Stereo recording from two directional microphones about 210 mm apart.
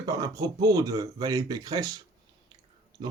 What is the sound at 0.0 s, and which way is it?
Speech, 15° right (ahead or behind).